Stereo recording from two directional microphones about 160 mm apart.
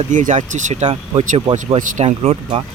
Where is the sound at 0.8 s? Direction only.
35° right (ahead or behind).